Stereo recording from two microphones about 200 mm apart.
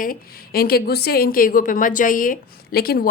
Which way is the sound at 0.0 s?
45° left (ahead or behind).